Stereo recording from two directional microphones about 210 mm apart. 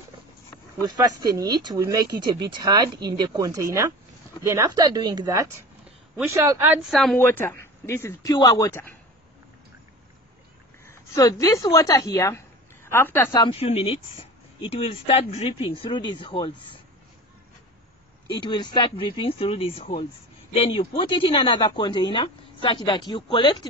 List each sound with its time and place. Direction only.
0.8 s speech: 20° right (ahead or behind)
6.9 s a woman's voice: centre (ahead or behind)
7.2 s speech: 10° left (ahead or behind)
10.9 s a woman's voice: 15° left (ahead or behind)
18.3 s a woman's voice: 20° left (ahead or behind)